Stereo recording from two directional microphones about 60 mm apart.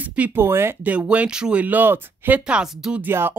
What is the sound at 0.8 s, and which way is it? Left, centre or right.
Speech, right.